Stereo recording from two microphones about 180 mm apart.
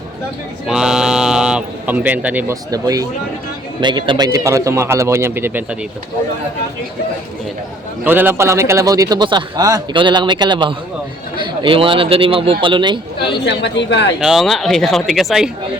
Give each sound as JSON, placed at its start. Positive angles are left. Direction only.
{"t": 0.7, "sound": "speech", "side_deg": -5}
{"t": 2.6, "sound": "a man's voice", "side_deg": -20}
{"t": 8.0, "sound": "a man's voice", "side_deg": -10}
{"t": 13.4, "sound": "a woman's voice", "side_deg": 75}
{"t": 14.2, "sound": "speech", "side_deg": 0}